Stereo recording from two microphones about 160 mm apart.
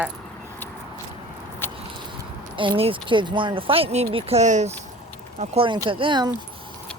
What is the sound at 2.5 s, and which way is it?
Speech, 30° right (ahead or behind).